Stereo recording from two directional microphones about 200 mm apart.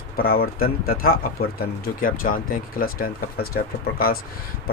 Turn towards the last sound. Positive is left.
turn(degrees=50)  # may be behind; listen again after turning